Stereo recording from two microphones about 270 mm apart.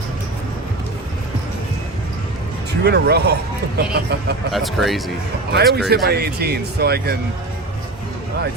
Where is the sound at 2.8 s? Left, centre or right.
Right.